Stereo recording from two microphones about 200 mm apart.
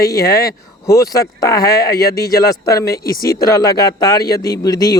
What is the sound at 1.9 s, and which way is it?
Speech, 50° left (ahead or behind).